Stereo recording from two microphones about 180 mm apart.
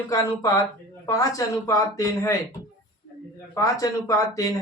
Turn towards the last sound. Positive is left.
turn(degrees=20)  # may be behind; listen again after turning